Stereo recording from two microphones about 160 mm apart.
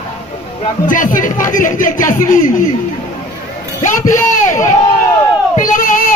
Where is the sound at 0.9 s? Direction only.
55° left (ahead or behind).